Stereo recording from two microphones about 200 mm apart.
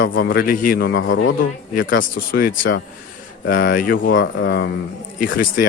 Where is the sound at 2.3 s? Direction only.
50° left (ahead or behind).